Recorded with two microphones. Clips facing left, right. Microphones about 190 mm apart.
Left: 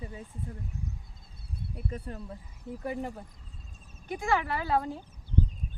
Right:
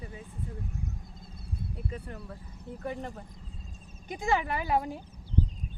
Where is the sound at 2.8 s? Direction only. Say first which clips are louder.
Left 2 dB; 5° left (ahead or behind).